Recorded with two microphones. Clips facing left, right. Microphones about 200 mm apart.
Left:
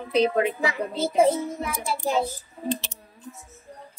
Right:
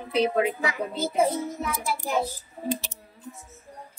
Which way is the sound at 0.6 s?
30° left (ahead or behind).